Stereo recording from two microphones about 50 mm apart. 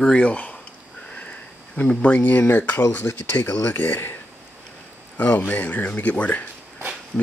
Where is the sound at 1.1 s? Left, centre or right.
Left.